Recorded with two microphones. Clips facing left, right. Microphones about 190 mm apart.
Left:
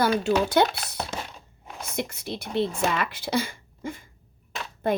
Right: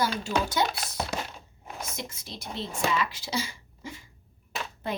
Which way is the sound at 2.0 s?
60° left (ahead or behind).